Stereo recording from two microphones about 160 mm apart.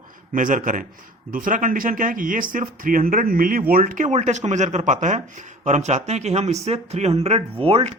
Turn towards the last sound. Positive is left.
turn(degrees=-35)  # may be behind; listen again after turning